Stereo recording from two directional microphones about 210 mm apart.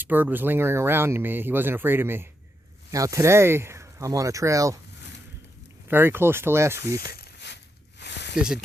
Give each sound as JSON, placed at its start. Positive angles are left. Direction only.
{"t": 0.0, "sound": "speech", "side_deg": -10}
{"t": 5.9, "sound": "speech", "side_deg": -10}
{"t": 7.1, "sound": "a sound", "side_deg": 50}